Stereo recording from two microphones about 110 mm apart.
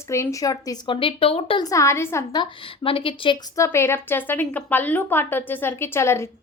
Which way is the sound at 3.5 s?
25° left (ahead or behind).